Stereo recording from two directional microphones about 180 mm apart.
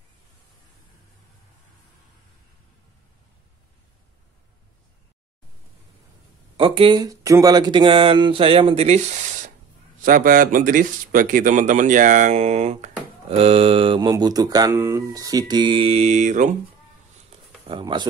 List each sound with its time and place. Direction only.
6.5 s speech: 30° right (ahead or behind)
17.6 s speech: 25° right (ahead or behind)